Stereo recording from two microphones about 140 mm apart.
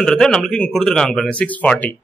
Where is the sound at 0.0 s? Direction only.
5° left (ahead or behind).